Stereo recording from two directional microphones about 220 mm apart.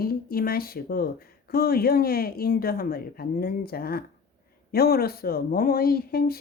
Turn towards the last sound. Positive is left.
turn(degrees=45)  # may be behind; listen again after turning